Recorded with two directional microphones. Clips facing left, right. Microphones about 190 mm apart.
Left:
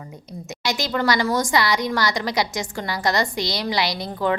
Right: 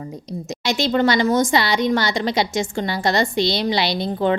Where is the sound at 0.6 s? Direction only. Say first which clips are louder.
Right 5 dB; 25° right (ahead or behind).